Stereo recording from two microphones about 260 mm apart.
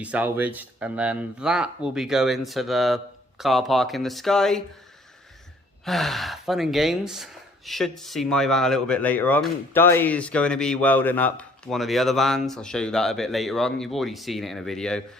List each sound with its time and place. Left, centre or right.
0.0 s speech: centre
5.8 s speech: centre